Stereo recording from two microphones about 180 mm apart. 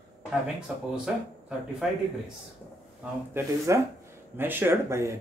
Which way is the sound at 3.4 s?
15° right (ahead or behind).